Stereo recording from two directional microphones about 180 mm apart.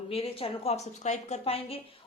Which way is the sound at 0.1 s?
30° left (ahead or behind).